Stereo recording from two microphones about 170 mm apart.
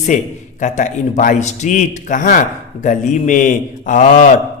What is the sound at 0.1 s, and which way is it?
A man's voice, 45° left (ahead or behind).